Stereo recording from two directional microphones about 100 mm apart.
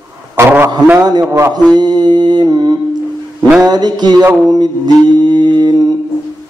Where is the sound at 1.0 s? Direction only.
45° right (ahead or behind).